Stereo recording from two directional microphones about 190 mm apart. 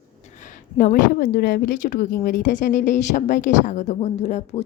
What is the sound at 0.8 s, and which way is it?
A woman's voice, 45° left (ahead or behind).